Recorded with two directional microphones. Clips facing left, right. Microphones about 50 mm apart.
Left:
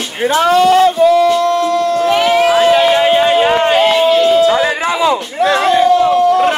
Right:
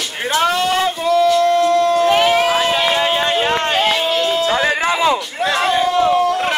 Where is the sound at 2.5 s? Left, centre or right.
Left.